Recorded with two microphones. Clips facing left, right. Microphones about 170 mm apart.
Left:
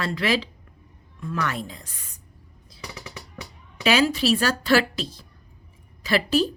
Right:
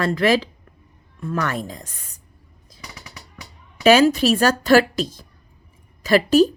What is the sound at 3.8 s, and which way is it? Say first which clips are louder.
A woman's voice: right 7 dB; 45° right (ahead or behind).